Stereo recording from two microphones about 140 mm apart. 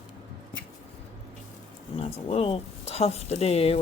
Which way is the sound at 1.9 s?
40° left (ahead or behind).